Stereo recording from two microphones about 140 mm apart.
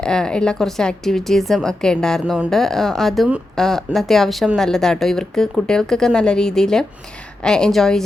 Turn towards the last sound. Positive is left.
turn(degrees=5)  # may be behind; listen again after turning